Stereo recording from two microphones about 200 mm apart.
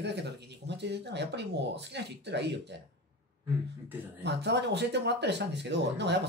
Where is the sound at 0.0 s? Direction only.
60° right (ahead or behind).